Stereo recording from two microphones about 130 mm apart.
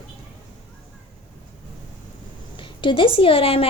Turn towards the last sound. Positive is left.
turn(degrees=45)  # may be behind; listen again after turning